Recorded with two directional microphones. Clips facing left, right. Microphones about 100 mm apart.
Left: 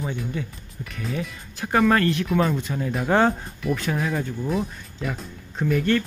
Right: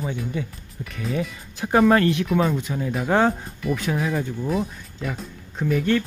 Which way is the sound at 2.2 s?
5° right (ahead or behind).